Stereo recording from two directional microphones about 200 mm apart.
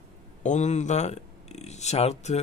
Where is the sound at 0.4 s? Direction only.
35° left (ahead or behind).